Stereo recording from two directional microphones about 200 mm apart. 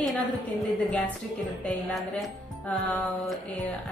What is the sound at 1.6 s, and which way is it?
Speech, centre (ahead or behind).